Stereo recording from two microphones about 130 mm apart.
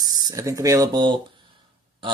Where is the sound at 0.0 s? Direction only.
30° right (ahead or behind).